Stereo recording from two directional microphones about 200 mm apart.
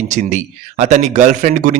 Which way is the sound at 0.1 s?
40° right (ahead or behind).